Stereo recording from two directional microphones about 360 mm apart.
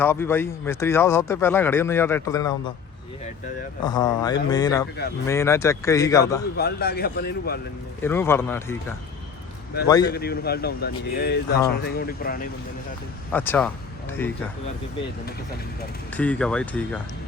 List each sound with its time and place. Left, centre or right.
0.0 s speech: centre
3.8 s speech: centre
6.6 s a man's voice: left
8.0 s speech: centre
9.8 s speech: centre
10.1 s a man's voice: left
13.3 s speech: centre
16.1 s speech: centre